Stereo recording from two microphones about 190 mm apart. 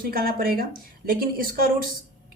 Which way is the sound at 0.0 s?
50° right (ahead or behind).